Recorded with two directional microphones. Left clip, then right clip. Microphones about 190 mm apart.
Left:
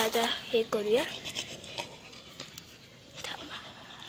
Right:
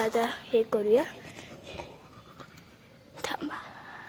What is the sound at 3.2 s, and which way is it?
Dog, 40° right (ahead or behind).